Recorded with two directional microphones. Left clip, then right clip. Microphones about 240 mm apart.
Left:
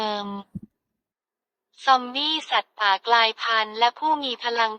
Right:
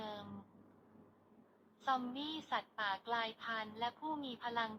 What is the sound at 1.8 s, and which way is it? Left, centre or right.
A woman's voice, left.